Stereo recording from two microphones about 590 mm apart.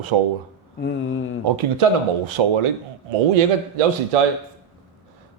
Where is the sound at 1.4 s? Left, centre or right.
Right.